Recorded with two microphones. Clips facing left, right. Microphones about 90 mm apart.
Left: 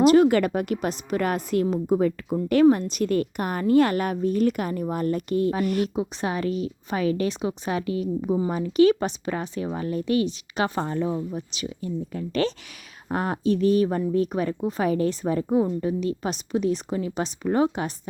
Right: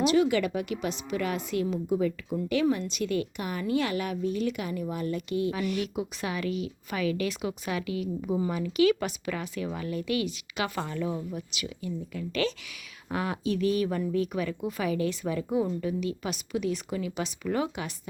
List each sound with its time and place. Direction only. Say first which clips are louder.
0.0 s a woman's voice: left 7 dB; 45° left (ahead or behind)